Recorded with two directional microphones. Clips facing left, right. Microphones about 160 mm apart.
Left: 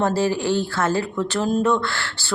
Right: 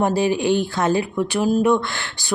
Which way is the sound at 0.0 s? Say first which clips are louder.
Right 2 dB; 15° right (ahead or behind).